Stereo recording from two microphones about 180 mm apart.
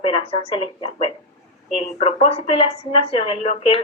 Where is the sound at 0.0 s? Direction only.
30° left (ahead or behind).